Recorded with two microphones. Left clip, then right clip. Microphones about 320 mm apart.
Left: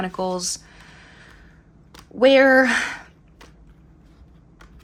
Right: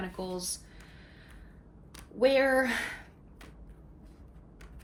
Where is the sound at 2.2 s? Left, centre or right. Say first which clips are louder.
Left 11 dB; left.